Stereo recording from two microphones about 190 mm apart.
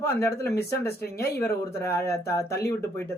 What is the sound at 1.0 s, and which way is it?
Speech, 55° left (ahead or behind).